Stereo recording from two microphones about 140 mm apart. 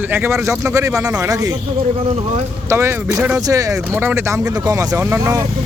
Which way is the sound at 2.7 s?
20° right (ahead or behind).